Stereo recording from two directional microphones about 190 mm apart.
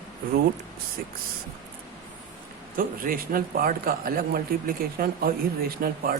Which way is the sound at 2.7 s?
50° right (ahead or behind).